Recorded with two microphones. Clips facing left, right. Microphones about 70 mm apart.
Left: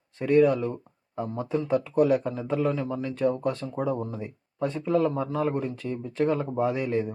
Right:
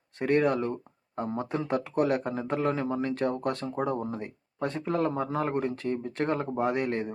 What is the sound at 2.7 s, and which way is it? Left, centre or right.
Speech, right.